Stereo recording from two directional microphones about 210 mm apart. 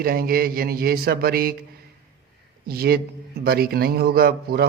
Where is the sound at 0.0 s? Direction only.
45° right (ahead or behind).